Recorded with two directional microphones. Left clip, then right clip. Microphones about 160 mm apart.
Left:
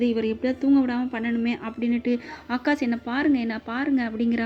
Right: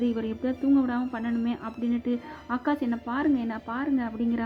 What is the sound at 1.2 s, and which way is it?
Speech, 5° left (ahead or behind).